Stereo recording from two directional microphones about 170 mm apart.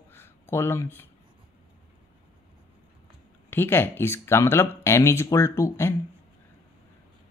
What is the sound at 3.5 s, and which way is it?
Speech, 10° left (ahead or behind).